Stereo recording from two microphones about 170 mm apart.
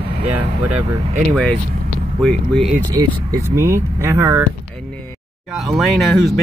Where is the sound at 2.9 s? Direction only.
20° right (ahead or behind).